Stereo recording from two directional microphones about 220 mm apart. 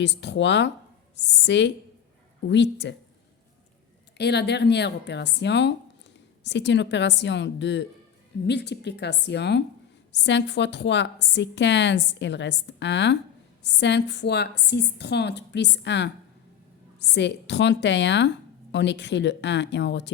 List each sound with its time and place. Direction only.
0.0 s a woman's voice: 50° left (ahead or behind)
4.2 s a woman's voice: 50° left (ahead or behind)